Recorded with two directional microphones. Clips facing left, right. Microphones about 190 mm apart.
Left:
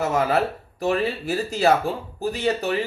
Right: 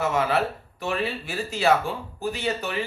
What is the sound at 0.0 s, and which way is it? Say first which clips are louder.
Speech: left 2 dB; 40° left (ahead or behind).